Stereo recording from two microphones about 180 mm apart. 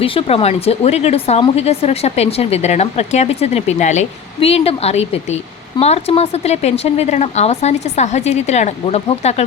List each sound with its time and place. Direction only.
0.0 s speech: 30° left (ahead or behind)